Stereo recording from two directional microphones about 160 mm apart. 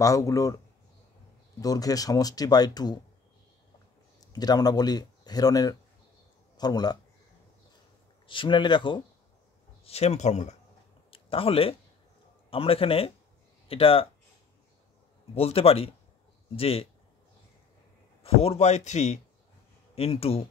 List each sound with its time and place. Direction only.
0.0 s speech: 20° left (ahead or behind)
1.6 s speech: 20° left (ahead or behind)
4.2 s speech: 25° left (ahead or behind)
8.3 s speech: 30° left (ahead or behind)
9.8 s speech: 40° left (ahead or behind)
11.1 s a sound: 35° left (ahead or behind)
12.4 s speech: 35° left (ahead or behind)
15.3 s speech: 40° left (ahead or behind)
18.2 s speech: 40° left (ahead or behind)